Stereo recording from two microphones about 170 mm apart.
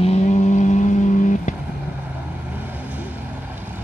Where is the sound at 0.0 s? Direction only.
40° left (ahead or behind).